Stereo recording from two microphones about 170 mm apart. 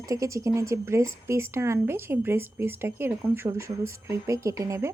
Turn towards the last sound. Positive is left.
turn(degrees=-20)  # may be behind; listen again after turning